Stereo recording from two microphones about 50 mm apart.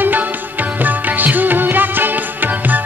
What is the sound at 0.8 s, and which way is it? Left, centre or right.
Music, right.